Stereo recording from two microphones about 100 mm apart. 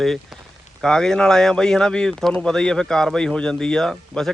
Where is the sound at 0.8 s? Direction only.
5° left (ahead or behind).